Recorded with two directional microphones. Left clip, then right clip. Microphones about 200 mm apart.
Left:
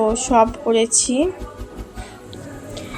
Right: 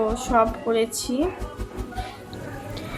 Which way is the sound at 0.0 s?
20° left (ahead or behind).